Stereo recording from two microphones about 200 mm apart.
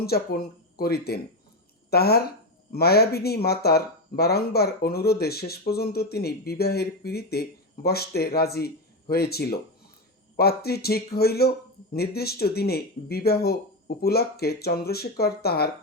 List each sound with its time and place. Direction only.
0.0 s speech: 50° left (ahead or behind)